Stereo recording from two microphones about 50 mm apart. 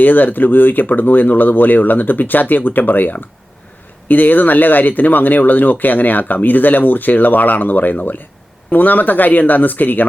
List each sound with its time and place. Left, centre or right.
0.0 s speech: left